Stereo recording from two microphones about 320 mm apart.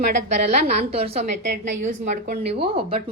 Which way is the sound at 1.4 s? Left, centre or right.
Right.